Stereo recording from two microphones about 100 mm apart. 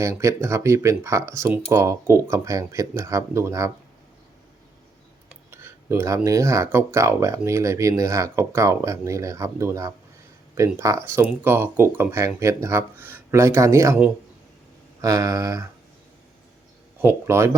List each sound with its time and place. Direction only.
0.0 s speech: 30° right (ahead or behind)
5.5 s speech: 25° right (ahead or behind)
15.0 s speech: 35° right (ahead or behind)
17.0 s speech: 25° right (ahead or behind)